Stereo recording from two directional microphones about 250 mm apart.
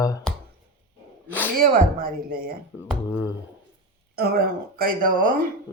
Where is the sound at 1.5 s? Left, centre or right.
Right.